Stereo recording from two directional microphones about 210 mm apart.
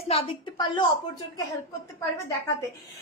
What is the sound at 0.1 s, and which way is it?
A woman's voice, 20° left (ahead or behind).